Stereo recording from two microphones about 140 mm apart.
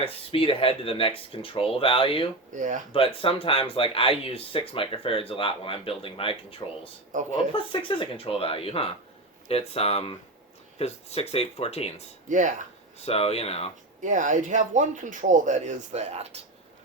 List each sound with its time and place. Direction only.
0.0 s speech: 40° left (ahead or behind)
2.6 s speech: 65° right (ahead or behind)
2.9 s speech: 40° left (ahead or behind)
7.1 s speech: 65° right (ahead or behind)
7.5 s speech: 40° left (ahead or behind)
12.3 s speech: 65° right (ahead or behind)
13.0 s speech: 45° left (ahead or behind)
14.0 s speech: 65° right (ahead or behind)